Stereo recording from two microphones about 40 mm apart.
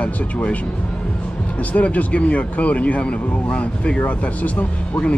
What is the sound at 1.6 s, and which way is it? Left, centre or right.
Speech, left.